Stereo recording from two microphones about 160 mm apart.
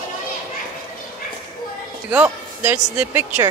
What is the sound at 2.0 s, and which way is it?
Speech, 10° right (ahead or behind).